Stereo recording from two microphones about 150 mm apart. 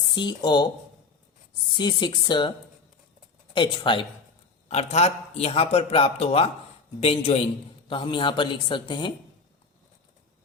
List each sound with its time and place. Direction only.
0.1 s speech: 30° left (ahead or behind)
1.8 s a woman's voice: 30° left (ahead or behind)
3.5 s a woman's voice: 35° left (ahead or behind)
4.7 s a man's voice: 45° left (ahead or behind)